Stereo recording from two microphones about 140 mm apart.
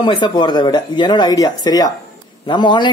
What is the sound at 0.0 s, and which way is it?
Speech, 35° left (ahead or behind).